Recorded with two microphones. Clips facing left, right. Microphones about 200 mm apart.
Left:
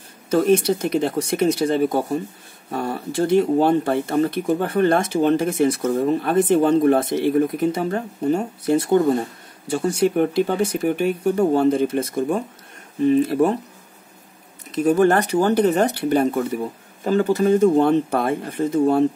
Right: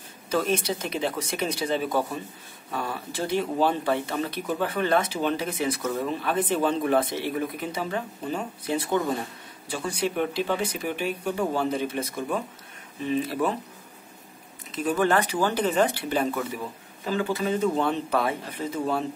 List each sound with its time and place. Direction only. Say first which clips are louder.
0.3 s speech: left 9 dB; 50° left (ahead or behind)
14.8 s speech: left 7 dB; 40° left (ahead or behind)